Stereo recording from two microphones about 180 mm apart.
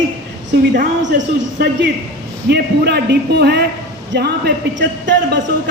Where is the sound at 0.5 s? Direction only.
65° right (ahead or behind).